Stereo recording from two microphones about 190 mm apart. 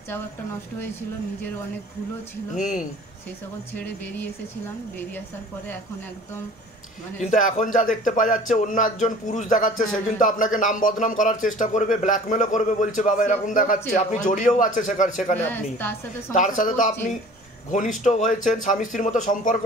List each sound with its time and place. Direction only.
2.5 s speech: 40° left (ahead or behind)
3.7 s a woman's voice: 10° left (ahead or behind)
7.2 s a man's voice: 40° left (ahead or behind)
15.3 s a woman's voice: 10° left (ahead or behind)
16.3 s a man's voice: 40° left (ahead or behind)